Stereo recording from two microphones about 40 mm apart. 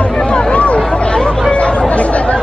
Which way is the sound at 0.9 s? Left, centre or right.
Left.